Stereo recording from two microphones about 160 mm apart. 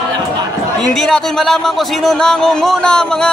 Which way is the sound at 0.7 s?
5° left (ahead or behind).